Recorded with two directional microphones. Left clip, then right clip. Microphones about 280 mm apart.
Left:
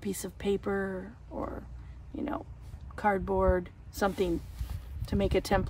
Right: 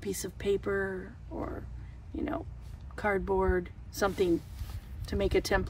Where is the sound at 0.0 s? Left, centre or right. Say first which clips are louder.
Right 1 dB; centre.